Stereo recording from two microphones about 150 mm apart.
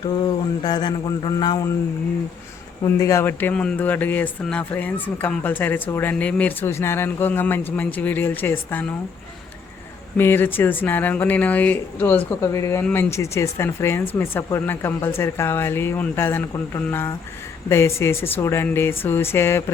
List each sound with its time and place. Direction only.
0.0 s mantra: 30° left (ahead or behind)
3.0 s speech: 20° left (ahead or behind)
10.2 s speech: 15° left (ahead or behind)